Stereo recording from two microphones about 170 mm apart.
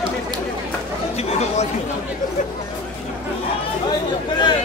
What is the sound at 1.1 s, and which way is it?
Chatter, 40° left (ahead or behind).